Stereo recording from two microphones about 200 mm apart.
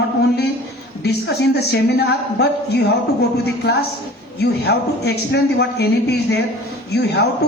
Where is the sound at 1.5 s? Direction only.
55° left (ahead or behind).